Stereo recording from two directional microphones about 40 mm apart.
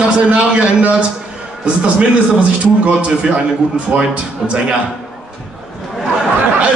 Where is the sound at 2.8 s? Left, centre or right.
Right.